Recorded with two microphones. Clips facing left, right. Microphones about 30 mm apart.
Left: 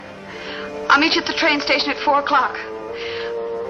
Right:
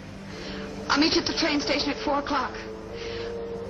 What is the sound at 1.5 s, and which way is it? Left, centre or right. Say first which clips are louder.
Speech: left 7 dB; left.